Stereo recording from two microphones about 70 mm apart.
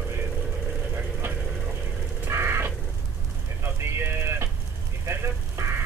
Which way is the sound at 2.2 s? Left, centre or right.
Right.